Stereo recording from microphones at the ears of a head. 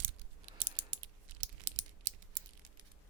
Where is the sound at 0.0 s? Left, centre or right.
Right.